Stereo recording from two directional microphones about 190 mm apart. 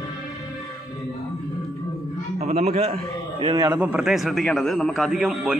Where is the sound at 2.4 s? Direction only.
35° right (ahead or behind).